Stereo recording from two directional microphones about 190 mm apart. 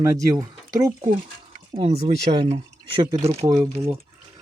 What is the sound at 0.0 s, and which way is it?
Speech, 15° right (ahead or behind).